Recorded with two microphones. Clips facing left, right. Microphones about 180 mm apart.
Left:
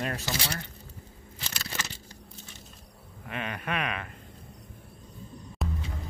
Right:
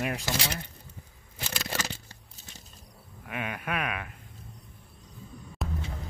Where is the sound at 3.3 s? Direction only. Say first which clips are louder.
Even; 10° right (ahead or behind).